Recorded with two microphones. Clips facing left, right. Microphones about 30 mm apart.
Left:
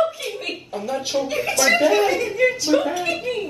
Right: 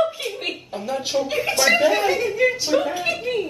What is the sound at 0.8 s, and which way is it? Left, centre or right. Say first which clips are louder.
Speech: even; centre.